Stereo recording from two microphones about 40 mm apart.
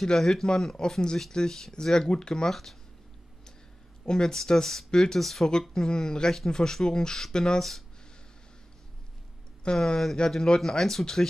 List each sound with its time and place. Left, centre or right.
0.0 s speech: centre
4.0 s speech: centre
5.2 s speech: centre
9.7 s speech: centre